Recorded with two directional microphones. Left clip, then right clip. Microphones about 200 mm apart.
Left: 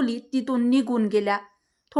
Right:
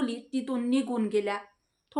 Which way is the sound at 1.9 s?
40° left (ahead or behind).